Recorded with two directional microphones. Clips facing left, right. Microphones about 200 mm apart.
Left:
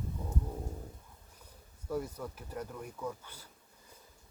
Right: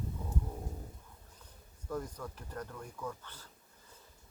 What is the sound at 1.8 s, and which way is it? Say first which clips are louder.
Speech: left 3 dB; 10° left (ahead or behind).